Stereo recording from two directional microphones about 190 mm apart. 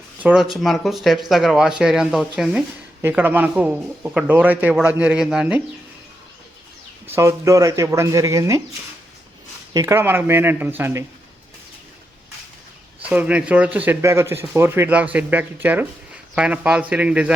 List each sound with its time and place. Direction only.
0.2 s speech: 5° right (ahead or behind)
7.2 s speech: 15° right (ahead or behind)
9.7 s speech: 15° right (ahead or behind)
13.0 s speech: 5° right (ahead or behind)